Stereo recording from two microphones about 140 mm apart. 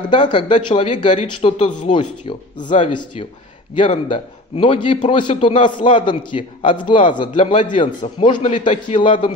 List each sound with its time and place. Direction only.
0.1 s a man's voice: 35° left (ahead or behind)
1.1 s speech: 55° left (ahead or behind)
1.9 s a man's voice: 35° left (ahead or behind)